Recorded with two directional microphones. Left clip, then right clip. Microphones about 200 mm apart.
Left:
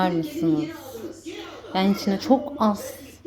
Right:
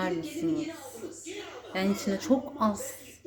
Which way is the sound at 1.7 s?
25° left (ahead or behind).